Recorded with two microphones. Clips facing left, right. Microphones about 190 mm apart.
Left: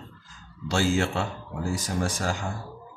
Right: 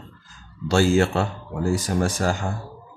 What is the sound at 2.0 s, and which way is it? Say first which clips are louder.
Speech: right 5 dB; 50° right (ahead or behind).